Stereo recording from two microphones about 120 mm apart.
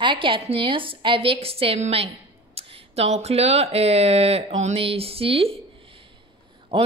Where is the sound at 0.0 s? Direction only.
45° right (ahead or behind); by 4.7 s 75° right (ahead or behind).